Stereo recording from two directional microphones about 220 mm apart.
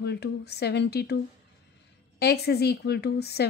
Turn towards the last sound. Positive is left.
turn(degrees=45)  # may be behind; listen again after turning